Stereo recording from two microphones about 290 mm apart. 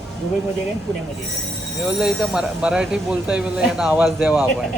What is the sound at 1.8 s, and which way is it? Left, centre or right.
Speech, centre.